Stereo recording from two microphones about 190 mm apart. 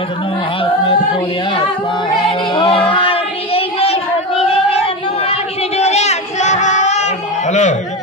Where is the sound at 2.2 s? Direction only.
30° left (ahead or behind).